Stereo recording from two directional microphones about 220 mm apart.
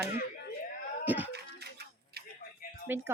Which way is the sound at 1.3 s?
50° right (ahead or behind).